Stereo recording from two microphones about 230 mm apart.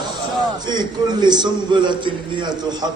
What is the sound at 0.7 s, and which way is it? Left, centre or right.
A man's voice, centre.